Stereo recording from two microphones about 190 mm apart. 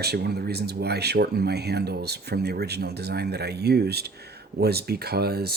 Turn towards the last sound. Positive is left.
turn(degrees=-55)  # may be behind; listen again after turning